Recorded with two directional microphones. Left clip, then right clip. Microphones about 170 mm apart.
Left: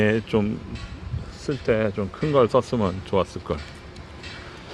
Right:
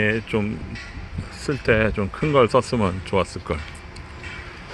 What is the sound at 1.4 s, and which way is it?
Speech, 15° right (ahead or behind).